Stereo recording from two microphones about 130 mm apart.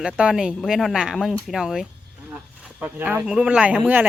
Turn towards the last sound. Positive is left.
turn(degrees=-10)  # may be behind; listen again after turning